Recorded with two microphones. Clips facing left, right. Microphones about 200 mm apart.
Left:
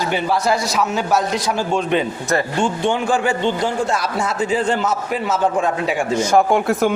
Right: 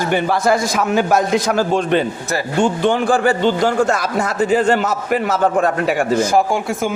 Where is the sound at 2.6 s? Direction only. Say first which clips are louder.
Right 3 dB; 45° right (ahead or behind); by 3.8 s 65° right (ahead or behind).